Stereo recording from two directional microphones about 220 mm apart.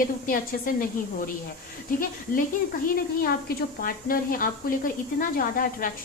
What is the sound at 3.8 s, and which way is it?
A woman's voice, 40° left (ahead or behind).